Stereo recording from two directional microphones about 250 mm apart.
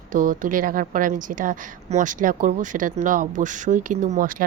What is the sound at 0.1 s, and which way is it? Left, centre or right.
A woman's voice, right.